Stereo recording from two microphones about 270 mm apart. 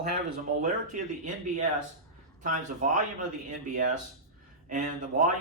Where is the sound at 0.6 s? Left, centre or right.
Right.